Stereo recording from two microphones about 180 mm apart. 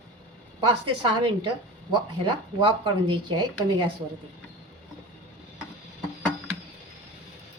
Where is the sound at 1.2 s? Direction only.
30° right (ahead or behind).